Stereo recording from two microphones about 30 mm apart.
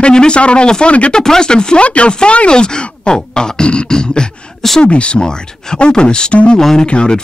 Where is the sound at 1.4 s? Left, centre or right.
Left.